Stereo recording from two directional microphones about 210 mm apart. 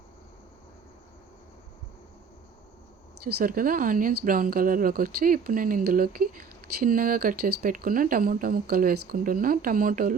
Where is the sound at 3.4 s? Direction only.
40° right (ahead or behind).